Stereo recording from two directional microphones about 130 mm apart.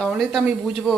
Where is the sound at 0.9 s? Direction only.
5° right (ahead or behind).